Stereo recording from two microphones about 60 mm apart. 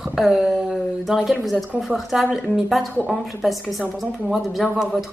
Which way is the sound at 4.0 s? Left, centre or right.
Centre.